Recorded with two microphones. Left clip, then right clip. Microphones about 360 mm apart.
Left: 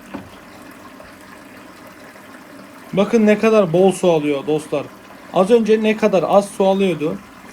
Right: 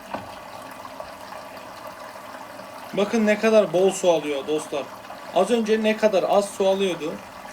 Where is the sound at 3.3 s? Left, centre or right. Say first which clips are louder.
Left 4 dB; centre.